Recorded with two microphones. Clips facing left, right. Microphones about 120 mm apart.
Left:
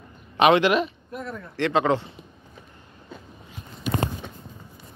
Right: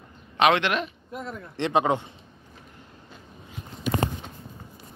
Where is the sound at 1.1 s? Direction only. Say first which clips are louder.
Right 1 dB; 20° right (ahead or behind).